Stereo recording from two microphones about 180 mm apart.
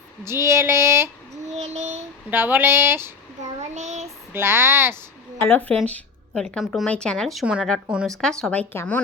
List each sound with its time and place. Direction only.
0.3 s female singing: 15° right (ahead or behind)
1.5 s child singing: 40° right (ahead or behind)
2.3 s a woman's voice: 10° right (ahead or behind)
3.6 s a sound: 40° right (ahead or behind)
4.3 s female singing: 15° right (ahead or behind)
5.4 s a woman's voice: 10° left (ahead or behind)